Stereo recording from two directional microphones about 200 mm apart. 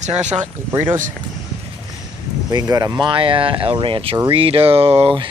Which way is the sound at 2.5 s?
20° right (ahead or behind).